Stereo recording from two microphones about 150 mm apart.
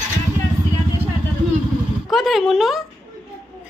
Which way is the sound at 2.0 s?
Centre (ahead or behind).